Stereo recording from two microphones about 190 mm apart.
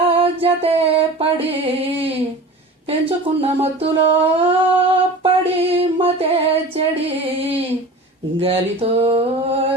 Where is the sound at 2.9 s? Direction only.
30° right (ahead or behind).